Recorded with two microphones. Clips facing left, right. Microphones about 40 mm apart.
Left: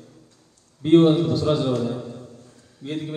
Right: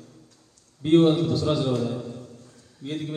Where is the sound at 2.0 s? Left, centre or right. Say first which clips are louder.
Left 1 dB; left.